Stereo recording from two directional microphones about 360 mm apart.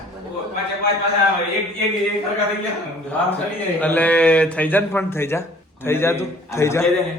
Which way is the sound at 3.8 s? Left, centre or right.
Centre.